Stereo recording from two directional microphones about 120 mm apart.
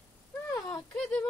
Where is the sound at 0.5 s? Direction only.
25° left (ahead or behind).